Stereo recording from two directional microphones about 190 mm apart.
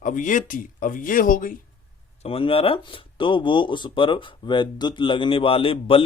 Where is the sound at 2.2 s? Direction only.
30° left (ahead or behind).